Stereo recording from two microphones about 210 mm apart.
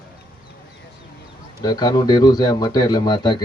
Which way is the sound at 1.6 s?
20° left (ahead or behind).